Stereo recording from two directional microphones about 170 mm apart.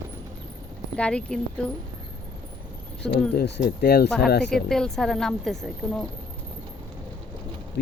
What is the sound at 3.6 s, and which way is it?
Speech, 65° left (ahead or behind).